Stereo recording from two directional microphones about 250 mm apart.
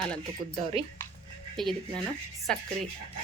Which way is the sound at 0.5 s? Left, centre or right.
Right.